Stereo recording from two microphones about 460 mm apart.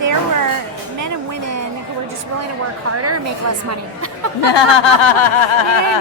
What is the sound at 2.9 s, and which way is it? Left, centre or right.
Speech, right.